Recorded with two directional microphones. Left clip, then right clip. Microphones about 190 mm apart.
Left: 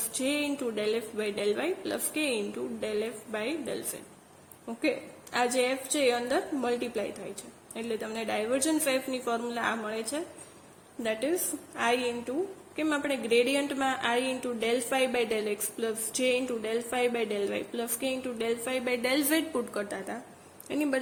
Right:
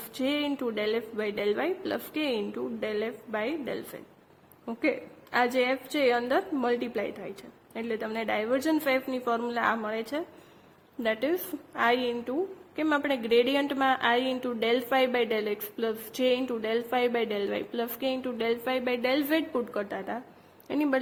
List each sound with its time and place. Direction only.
0.2 s a woman's voice: 25° right (ahead or behind)
20.7 s a woman's voice: 30° right (ahead or behind)